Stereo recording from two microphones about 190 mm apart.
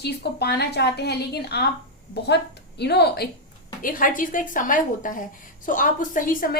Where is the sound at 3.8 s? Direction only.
45° left (ahead or behind).